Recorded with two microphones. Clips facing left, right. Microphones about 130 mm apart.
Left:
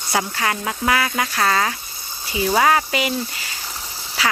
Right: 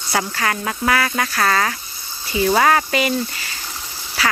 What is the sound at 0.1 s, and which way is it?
Speech, 15° left (ahead or behind).